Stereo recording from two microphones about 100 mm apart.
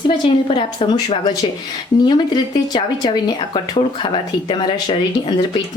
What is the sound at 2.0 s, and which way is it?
Speech, 45° left (ahead or behind).